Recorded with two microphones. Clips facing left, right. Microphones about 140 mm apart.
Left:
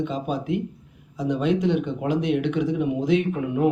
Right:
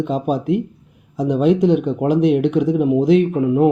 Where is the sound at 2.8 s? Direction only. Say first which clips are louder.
Right 9 dB; 50° right (ahead or behind).